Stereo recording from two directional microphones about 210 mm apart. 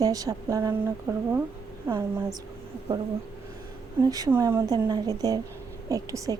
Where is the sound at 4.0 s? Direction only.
15° right (ahead or behind).